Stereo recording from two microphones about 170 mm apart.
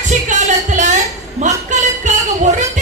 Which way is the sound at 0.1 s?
45° right (ahead or behind).